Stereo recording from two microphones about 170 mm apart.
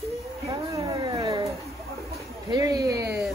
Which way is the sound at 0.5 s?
25° right (ahead or behind).